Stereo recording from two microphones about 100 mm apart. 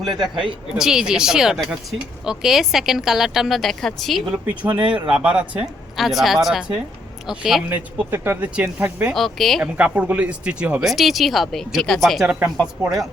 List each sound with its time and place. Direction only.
0.0 s a man's voice: 45° right (ahead or behind)
0.8 s speech: 5° right (ahead or behind)
4.9 s speech: 10° right (ahead or behind)
7.7 s speech: 15° right (ahead or behind)
9.1 s speech: centre (ahead or behind)
9.7 s speech: 15° right (ahead or behind)
10.8 s speech: centre (ahead or behind)